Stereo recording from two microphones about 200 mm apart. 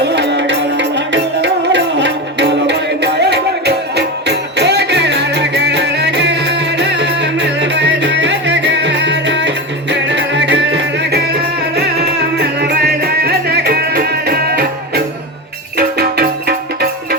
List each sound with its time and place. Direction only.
0.0 s music: 60° right (ahead or behind)
12.4 s music: 55° right (ahead or behind)